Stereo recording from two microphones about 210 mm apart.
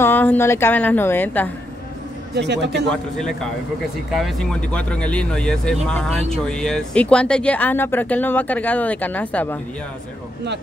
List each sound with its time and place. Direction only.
0.0 s speech: 10° left (ahead or behind)
2.3 s a man's voice: 55° right (ahead or behind)
2.9 s speech: 5° left (ahead or behind)